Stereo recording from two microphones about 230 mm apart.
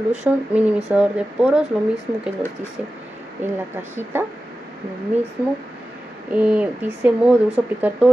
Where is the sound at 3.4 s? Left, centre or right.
Centre.